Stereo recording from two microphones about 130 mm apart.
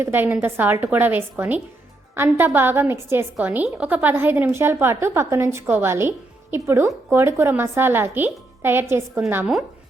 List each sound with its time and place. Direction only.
0.0 s a woman's voice: 15° right (ahead or behind)